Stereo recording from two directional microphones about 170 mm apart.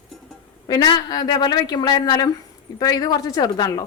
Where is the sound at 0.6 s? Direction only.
25° left (ahead or behind).